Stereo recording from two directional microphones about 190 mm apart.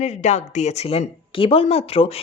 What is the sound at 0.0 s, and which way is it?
Speech, 35° left (ahead or behind).